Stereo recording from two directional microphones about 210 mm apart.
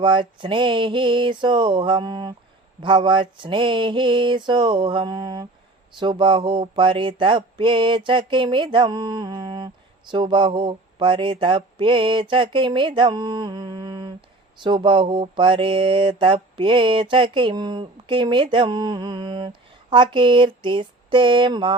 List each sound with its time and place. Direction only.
0.0 s mantra: 20° right (ahead or behind)